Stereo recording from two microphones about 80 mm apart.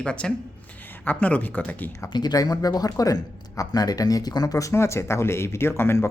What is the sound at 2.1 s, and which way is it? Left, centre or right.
Speech, left.